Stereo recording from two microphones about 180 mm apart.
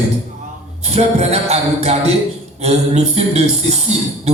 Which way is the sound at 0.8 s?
35° right (ahead or behind).